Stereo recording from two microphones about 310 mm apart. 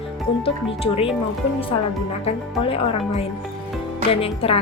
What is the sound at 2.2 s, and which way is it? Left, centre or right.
A woman's voice, centre.